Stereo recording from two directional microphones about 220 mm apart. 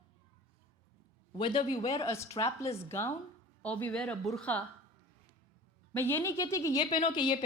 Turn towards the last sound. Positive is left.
turn(degrees=20)  # may be behind; listen again after turning